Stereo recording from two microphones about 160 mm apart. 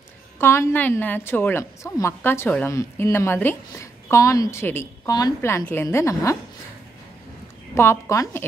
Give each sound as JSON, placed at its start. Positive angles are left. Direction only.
{"t": 0.4, "sound": "a woman's voice", "side_deg": 15}
{"t": 7.7, "sound": "a woman's voice", "side_deg": 15}